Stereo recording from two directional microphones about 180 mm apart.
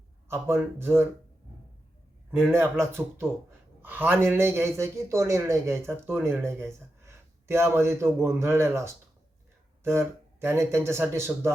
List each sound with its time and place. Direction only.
0.3 s speech: 15° right (ahead or behind)
2.5 s speech: 15° right (ahead or behind)
10.4 s speech: 15° right (ahead or behind)